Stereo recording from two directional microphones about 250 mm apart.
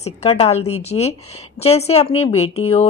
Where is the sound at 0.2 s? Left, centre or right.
Left.